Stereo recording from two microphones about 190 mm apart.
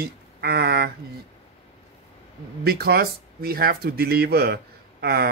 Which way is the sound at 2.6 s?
55° right (ahead or behind).